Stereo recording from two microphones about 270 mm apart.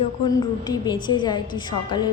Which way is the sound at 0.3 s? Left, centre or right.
Centre.